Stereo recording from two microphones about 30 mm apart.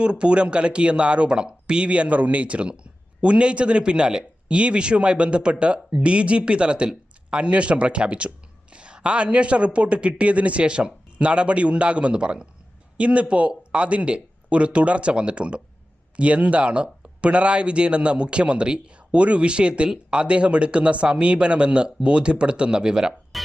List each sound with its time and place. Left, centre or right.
0.0 s speech: right
1.9 s speech: right
23.3 s cough: centre